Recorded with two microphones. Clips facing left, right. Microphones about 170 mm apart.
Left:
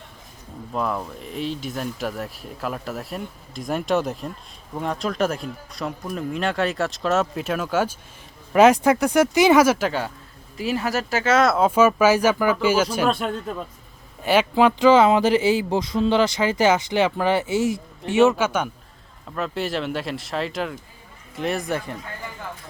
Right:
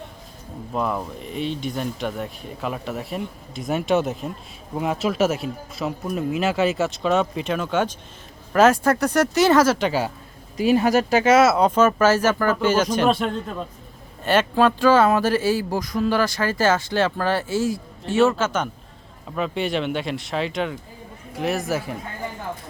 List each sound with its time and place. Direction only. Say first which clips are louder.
0.7 s speech: right 1 dB; 5° right (ahead or behind)
10.6 s speech: right 7 dB; 20° right (ahead or behind); by 13.3 s centre (ahead or behind)
14.2 s speech: left 1 dB; 10° left (ahead or behind)
19.4 s speech: right 2 dB; centre (ahead or behind)